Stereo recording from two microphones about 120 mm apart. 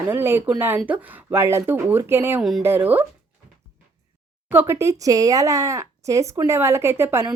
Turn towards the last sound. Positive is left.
turn(degrees=-20)  # may be behind; listen again after turning